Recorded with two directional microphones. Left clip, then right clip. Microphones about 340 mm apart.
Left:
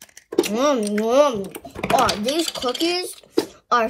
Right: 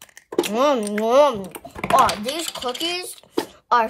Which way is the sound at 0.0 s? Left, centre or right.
Centre.